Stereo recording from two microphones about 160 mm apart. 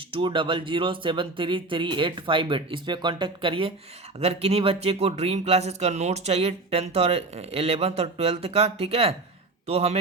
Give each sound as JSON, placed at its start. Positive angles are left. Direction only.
{"t": 0.1, "sound": "speech", "side_deg": -30}